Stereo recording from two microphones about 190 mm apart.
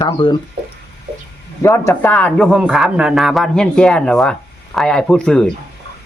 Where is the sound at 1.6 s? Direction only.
15° left (ahead or behind).